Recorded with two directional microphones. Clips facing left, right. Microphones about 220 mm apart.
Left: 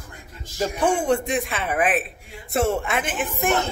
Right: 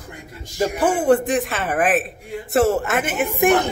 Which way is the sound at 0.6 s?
5° right (ahead or behind).